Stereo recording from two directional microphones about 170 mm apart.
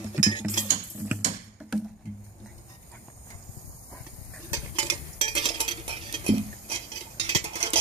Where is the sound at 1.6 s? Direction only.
5° right (ahead or behind).